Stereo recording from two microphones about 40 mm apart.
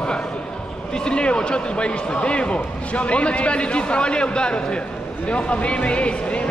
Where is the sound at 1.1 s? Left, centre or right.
Left.